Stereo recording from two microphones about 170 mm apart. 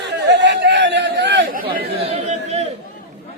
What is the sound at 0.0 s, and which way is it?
Chatter, 90° right.